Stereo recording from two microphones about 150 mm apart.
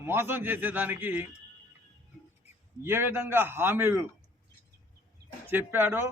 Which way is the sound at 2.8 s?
15° right (ahead or behind).